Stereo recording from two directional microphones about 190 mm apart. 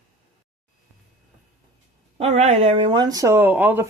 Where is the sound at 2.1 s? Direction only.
35° right (ahead or behind); by 3.8 s 10° right (ahead or behind).